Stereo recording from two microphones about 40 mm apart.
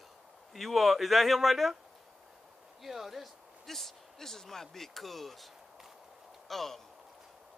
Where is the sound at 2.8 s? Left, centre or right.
Centre.